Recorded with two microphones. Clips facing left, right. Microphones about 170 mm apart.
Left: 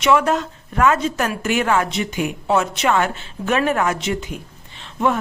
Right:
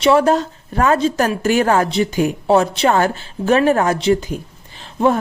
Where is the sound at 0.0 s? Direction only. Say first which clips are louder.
Right 4 dB; 35° right (ahead or behind).